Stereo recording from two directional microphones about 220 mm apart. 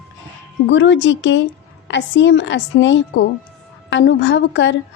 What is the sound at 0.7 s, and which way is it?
A woman's voice, 55° left (ahead or behind).